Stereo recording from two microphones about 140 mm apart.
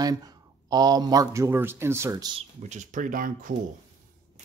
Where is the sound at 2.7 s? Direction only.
65° right (ahead or behind).